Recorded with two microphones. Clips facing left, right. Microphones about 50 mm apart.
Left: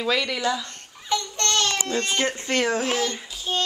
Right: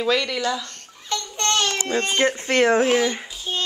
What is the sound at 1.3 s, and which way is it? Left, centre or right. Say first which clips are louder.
Babbling: right 5 dB; right.